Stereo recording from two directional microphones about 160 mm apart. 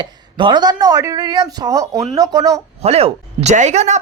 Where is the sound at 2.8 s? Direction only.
40° right (ahead or behind).